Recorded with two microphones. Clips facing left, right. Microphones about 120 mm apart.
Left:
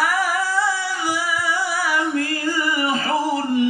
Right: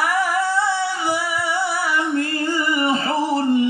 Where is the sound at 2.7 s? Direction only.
30° right (ahead or behind).